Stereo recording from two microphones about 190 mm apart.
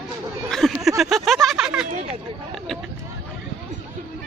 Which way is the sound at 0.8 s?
Centre (ahead or behind).